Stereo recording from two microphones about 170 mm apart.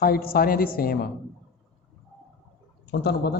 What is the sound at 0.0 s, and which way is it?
Speech, 65° left (ahead or behind).